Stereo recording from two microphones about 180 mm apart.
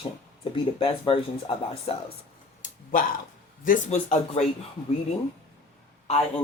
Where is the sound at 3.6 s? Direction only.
45° left (ahead or behind).